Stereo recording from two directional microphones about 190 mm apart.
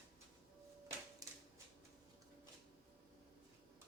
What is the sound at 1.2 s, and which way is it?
Typewriter, 20° right (ahead or behind).